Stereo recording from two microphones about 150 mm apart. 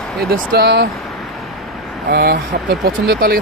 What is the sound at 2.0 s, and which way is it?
Speech, 90° right.